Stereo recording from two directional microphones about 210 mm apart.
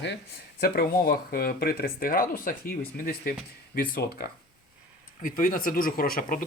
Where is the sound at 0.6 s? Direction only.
45° left (ahead or behind).